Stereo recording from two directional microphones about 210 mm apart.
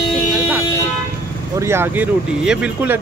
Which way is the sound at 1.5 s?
10° right (ahead or behind).